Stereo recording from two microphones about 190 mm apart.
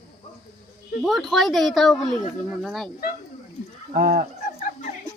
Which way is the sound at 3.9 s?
50° right (ahead or behind).